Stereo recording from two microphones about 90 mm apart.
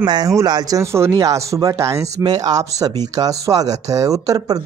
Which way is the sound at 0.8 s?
30° right (ahead or behind).